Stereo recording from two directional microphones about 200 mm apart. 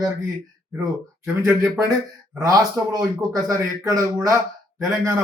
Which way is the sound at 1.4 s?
15° right (ahead or behind).